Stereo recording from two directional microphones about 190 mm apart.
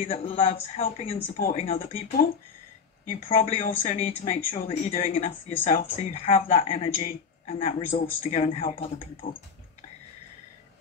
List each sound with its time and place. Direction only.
0.0 s speech: 35° left (ahead or behind)